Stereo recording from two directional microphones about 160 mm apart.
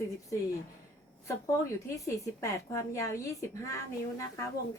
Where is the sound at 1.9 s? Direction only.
20° left (ahead or behind).